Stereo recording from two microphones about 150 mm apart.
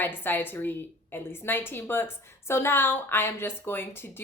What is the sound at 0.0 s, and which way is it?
A woman's voice, 15° left (ahead or behind).